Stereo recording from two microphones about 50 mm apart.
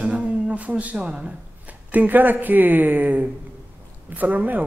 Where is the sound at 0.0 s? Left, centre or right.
Right.